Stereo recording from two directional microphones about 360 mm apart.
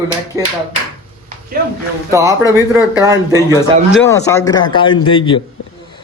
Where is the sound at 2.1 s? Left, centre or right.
Centre.